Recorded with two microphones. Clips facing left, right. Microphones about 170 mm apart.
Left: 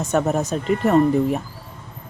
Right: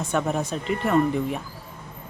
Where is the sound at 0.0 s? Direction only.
45° left (ahead or behind).